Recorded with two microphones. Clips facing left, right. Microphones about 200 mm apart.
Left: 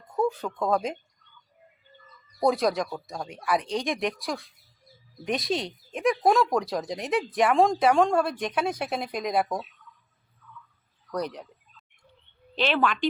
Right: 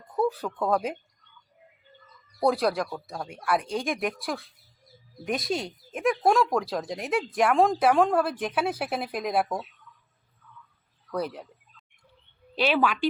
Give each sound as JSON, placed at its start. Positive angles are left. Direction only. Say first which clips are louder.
{"t": 0.7, "sound": "speech", "louder": "even", "side_deg": 0}
{"t": 2.4, "sound": "speech", "louder": "even", "side_deg": 0}
{"t": 11.1, "sound": "speech", "louder": "even", "side_deg": -5}
{"t": 12.5, "sound": "a woman's voice", "louder": "right 1 dB", "side_deg": -10}